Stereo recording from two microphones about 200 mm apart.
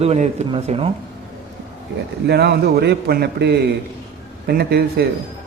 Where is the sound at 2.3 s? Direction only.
55° right (ahead or behind).